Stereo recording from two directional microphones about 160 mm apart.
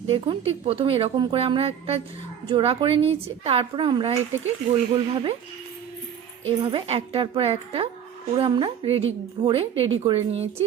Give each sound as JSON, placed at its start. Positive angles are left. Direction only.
{"t": 0.1, "sound": "a woman's voice", "side_deg": -35}
{"t": 6.4, "sound": "a woman's voice", "side_deg": -30}